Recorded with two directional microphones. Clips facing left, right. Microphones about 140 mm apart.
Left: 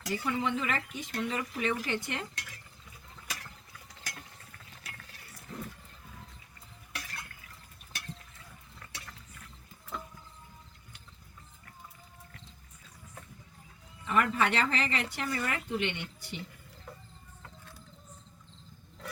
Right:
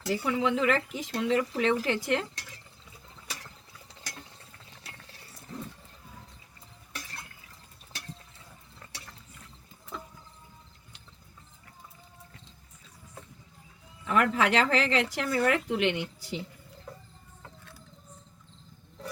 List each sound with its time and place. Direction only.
0.1 s speech: 90° right
2.3 s a sound: 35° right (ahead or behind)
3.2 s ratchet: 25° right (ahead or behind)
6.9 s a sound: 25° right (ahead or behind)
8.8 s water: 25° right (ahead or behind)
14.1 s speech: 90° right